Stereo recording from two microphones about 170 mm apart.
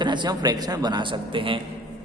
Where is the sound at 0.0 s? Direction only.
25° right (ahead or behind).